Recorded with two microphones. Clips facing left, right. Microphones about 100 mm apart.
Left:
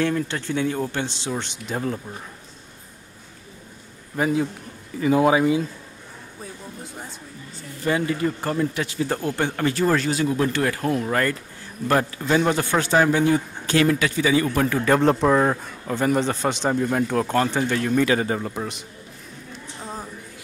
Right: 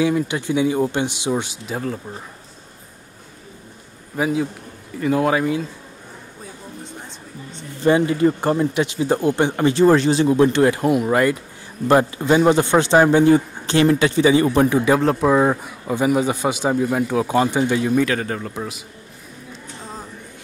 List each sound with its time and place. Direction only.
0.0 s a man's voice: 10° right (ahead or behind)
1.7 s a man's voice: centre (ahead or behind)
4.2 s a man's voice: centre (ahead or behind)
6.8 s a sound: 5° left (ahead or behind)
7.8 s speech: 25° right (ahead or behind)
14.9 s a man's voice: 5° right (ahead or behind)
18.0 s a man's voice: 5° left (ahead or behind)